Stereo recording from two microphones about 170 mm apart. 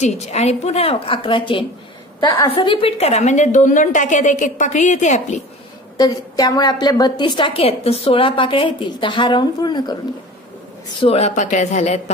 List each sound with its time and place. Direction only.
0.0 s a woman's voice: 40° left (ahead or behind)
5.9 s a woman's voice: 20° left (ahead or behind)
11.0 s a woman's voice: 35° left (ahead or behind)